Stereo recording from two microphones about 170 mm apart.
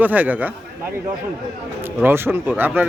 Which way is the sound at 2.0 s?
15° right (ahead or behind).